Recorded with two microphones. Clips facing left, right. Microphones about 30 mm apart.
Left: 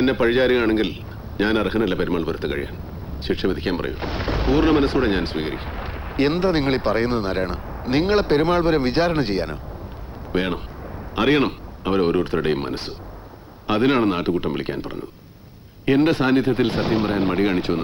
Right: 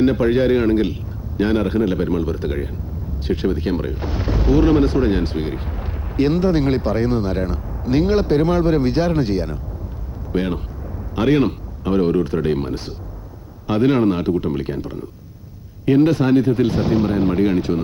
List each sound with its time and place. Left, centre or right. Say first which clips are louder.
0.0 s speech: right 2 dB; left
10.3 s speech: right 1 dB; left